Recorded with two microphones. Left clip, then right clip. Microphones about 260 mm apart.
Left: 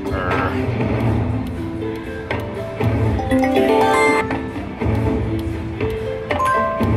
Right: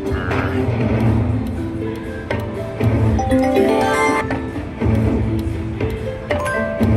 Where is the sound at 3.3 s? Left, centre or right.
Centre.